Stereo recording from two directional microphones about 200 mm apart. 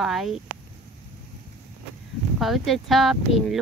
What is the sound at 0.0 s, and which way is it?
Speech, centre (ahead or behind).